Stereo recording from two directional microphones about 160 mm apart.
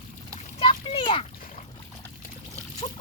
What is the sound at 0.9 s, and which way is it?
Splash, 30° left (ahead or behind).